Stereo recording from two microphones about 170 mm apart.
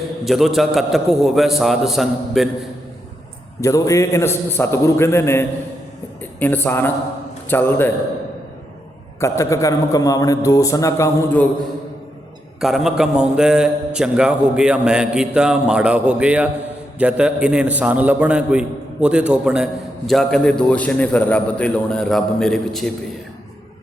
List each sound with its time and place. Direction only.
0.3 s a man's voice: centre (ahead or behind)
3.6 s a man's voice: 20° left (ahead or behind)
9.2 s a man's voice: 15° left (ahead or behind)
12.5 s a man's voice: centre (ahead or behind)